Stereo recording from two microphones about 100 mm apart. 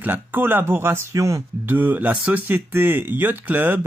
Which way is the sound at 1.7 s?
20° right (ahead or behind).